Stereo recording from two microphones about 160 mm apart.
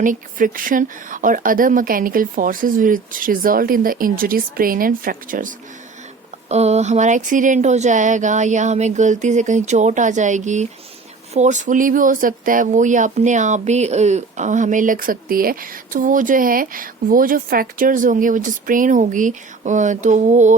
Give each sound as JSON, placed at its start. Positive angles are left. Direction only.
{"t": 0.0, "sound": "speech", "side_deg": -55}
{"t": 6.5, "sound": "speech", "side_deg": -40}